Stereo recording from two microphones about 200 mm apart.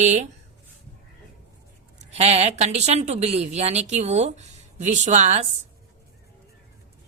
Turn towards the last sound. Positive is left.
turn(degrees=-35)  # may be behind; listen again after turning